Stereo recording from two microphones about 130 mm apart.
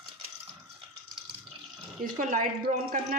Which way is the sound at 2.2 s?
90° right.